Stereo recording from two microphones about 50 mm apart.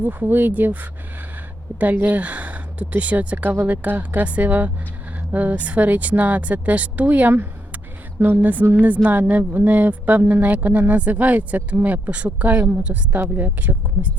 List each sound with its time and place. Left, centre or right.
0.0 s speech: right
13.3 s speech: right